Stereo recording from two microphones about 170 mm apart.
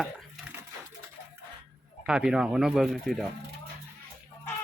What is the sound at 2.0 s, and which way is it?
Speech, 5° right (ahead or behind).